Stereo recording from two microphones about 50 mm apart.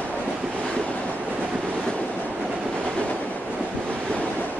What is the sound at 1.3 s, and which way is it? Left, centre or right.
Train, right.